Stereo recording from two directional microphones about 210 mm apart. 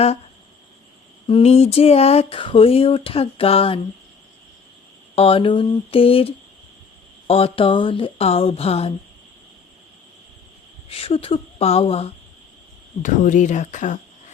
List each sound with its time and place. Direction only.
1.3 s speech: 30° left (ahead or behind)
5.1 s speech: 25° left (ahead or behind)
10.8 s speech: 25° left (ahead or behind)